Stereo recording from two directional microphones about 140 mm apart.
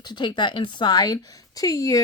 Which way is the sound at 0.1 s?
35° left (ahead or behind).